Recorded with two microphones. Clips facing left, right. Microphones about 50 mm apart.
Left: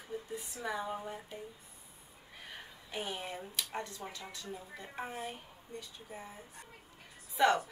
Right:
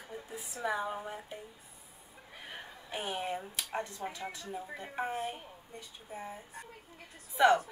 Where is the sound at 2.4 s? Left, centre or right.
Right.